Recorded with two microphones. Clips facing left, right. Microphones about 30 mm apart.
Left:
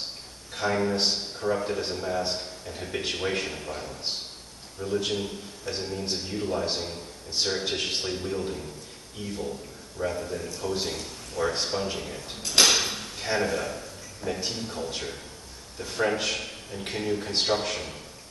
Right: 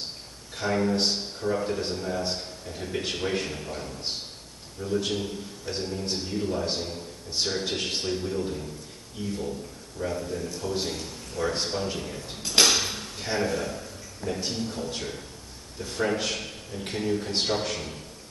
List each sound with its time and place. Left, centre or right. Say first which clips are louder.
0.6 s a man's voice: even; centre